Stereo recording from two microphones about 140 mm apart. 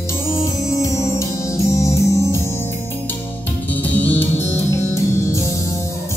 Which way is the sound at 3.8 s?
10° left (ahead or behind).